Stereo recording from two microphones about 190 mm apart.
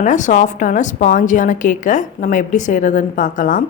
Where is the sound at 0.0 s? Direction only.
40° left (ahead or behind).